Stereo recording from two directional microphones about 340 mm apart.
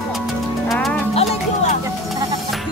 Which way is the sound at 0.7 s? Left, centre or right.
Centre.